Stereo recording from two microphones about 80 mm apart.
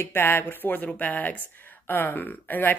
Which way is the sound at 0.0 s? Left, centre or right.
Left.